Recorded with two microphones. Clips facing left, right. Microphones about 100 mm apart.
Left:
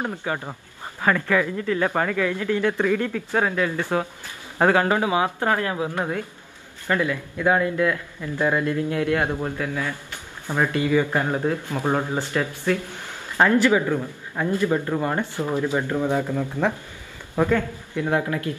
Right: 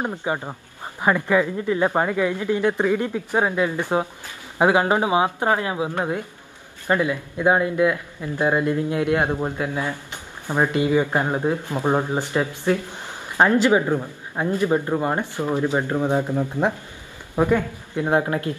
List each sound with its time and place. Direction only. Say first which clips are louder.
0.0 s a man's voice: right 2 dB; 20° right (ahead or behind)